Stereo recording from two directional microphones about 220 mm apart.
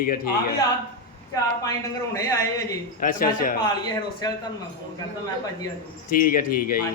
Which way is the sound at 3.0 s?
40° left (ahead or behind).